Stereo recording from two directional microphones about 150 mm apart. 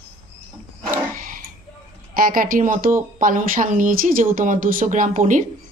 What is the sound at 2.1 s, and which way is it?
Speech, 70° right (ahead or behind).